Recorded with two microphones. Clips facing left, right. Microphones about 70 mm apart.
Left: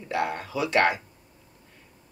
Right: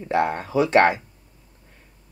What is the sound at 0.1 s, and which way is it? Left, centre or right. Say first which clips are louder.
Speech: right 6 dB; right.